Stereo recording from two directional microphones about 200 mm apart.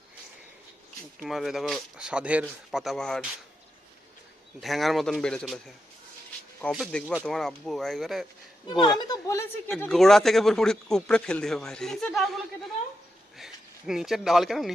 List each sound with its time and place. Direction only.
1.2 s speech: centre (ahead or behind)
4.6 s speech: centre (ahead or behind)
9.0 s a woman's voice: 15° left (ahead or behind)
9.6 s speech: 5° left (ahead or behind)
13.4 s speech: centre (ahead or behind)